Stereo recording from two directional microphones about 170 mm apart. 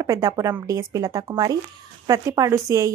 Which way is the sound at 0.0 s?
20° right (ahead or behind).